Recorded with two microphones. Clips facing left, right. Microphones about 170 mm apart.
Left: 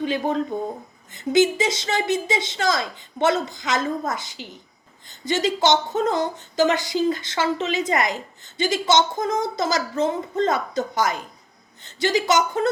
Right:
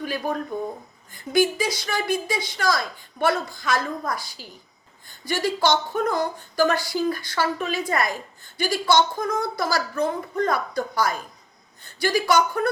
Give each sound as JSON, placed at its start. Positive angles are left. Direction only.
{"t": 0.0, "sound": "speech", "side_deg": 25}